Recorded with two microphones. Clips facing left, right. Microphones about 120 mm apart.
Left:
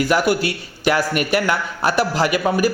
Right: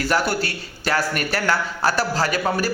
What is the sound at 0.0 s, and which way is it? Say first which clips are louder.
A man's voice: left 4 dB; 15° left (ahead or behind).